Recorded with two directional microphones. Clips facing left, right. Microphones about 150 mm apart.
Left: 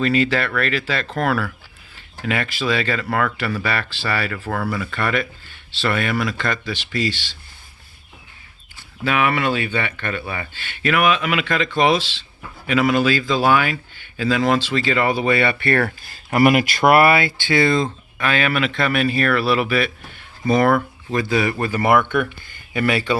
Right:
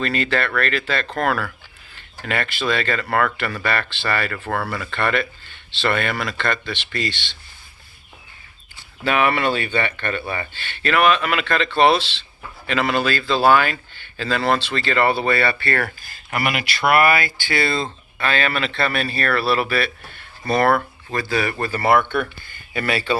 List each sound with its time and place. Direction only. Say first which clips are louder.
0.0 s speech: left 3 dB; 10° left (ahead or behind)
9.0 s speech: even; 5° left (ahead or behind)
16.0 s speech: left 9 dB; 35° left (ahead or behind); by 23.1 s 20° left (ahead or behind)